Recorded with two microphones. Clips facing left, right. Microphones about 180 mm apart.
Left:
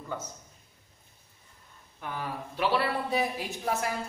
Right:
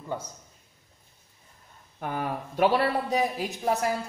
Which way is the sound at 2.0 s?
50° right (ahead or behind).